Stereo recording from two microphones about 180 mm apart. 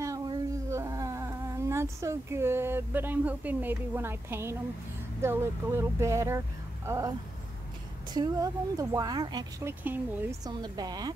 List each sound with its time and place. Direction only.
0.0 s a sound: 20° right (ahead or behind)
5.2 s a woman's voice: 15° right (ahead or behind)
9.8 s speech: 10° right (ahead or behind)
10.6 s a woman's voice: 20° right (ahead or behind)